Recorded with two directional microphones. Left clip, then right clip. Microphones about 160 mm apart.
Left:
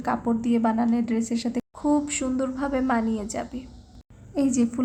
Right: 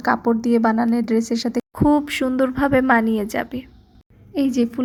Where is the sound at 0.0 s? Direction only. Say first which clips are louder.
Right 7 dB; 45° right (ahead or behind).